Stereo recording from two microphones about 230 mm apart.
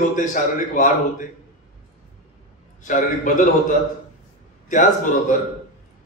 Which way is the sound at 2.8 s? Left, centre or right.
Left.